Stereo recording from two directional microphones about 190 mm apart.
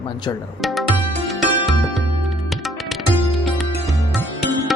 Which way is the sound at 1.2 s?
Centre (ahead or behind).